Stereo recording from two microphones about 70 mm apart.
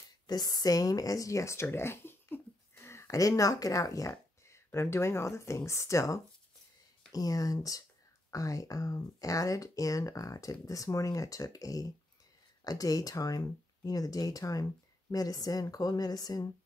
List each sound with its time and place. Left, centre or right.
0.3 s speech: left
3.2 s speech: left
4.6 s speech: left
7.1 s speech: left